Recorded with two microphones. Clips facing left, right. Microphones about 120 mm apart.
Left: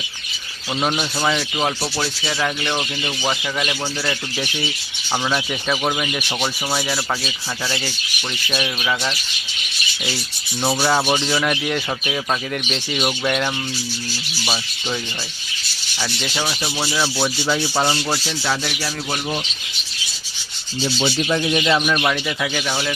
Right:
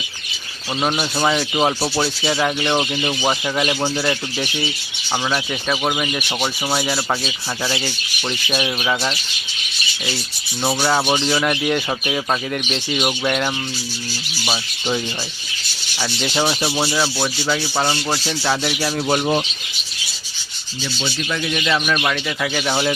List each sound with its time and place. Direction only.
0.8 s rub: 5° right (ahead or behind)
1.5 s speech: 15° right (ahead or behind)
5.3 s rub: 5° right (ahead or behind)
8.4 s speech: 15° right (ahead or behind)
10.6 s rub: centre (ahead or behind)
16.0 s speech: 5° right (ahead or behind)
16.3 s speech: 30° right (ahead or behind)
16.9 s rub: 5° right (ahead or behind)
18.8 s speech: 25° right (ahead or behind)
20.8 s speech: 25° left (ahead or behind)
21.8 s rub: 5° left (ahead or behind)
22.6 s speech: 20° right (ahead or behind)